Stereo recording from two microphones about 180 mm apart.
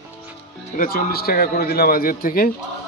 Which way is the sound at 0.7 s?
55° left (ahead or behind).